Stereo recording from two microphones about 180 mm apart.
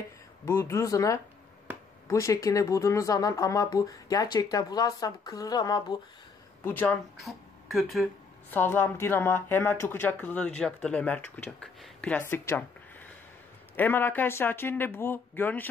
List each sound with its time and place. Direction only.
0.5 s speech: 15° left (ahead or behind)
6.6 s speech: 10° left (ahead or behind)
7.2 s speech: centre (ahead or behind)
8.5 s speech: 10° left (ahead or behind)